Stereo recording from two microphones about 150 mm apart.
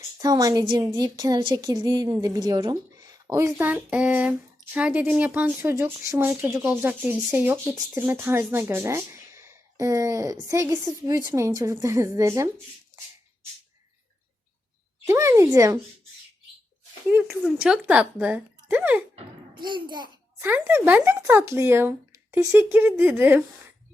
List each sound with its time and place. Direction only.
0.2 s a woman's voice: 25° right (ahead or behind)
15.0 s a woman's voice: 20° right (ahead or behind)
17.2 s a woman's voice: 5° right (ahead or behind)
19.5 s a woman's voice: 30° right (ahead or behind)
20.4 s a woman's voice: 15° right (ahead or behind)